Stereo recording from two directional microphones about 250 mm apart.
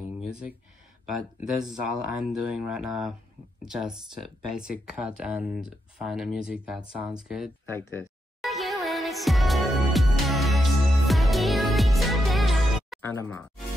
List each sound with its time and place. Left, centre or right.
0.3 s speech: centre
7.6 s speech: centre
8.4 s music: centre
13.2 s speech: centre